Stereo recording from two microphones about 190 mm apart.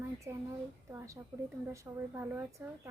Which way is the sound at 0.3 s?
10° right (ahead or behind).